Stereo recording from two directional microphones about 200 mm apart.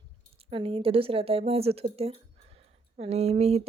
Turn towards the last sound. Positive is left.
turn(degrees=-30)  # may be behind; listen again after turning